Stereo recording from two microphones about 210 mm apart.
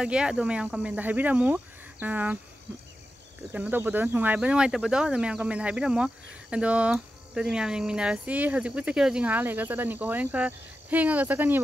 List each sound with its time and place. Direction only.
0.0 s speech: 5° right (ahead or behind)
3.5 s speech: 5° right (ahead or behind)